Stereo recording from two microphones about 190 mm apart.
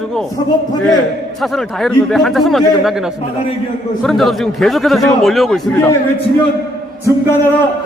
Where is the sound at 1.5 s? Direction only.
Centre (ahead or behind).